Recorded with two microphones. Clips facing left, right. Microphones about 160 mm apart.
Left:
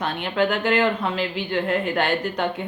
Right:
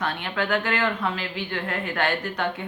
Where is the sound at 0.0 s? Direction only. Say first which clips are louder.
Left 5 dB; 20° left (ahead or behind).